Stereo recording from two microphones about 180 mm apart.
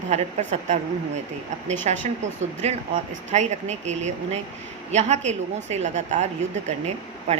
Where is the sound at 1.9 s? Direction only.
40° right (ahead or behind).